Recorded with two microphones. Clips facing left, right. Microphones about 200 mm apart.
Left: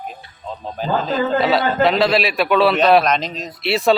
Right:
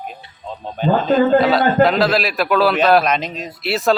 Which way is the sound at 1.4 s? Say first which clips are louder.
Right 3 dB; centre (ahead or behind).